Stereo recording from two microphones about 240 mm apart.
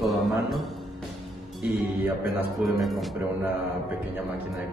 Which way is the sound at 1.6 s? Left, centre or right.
Centre.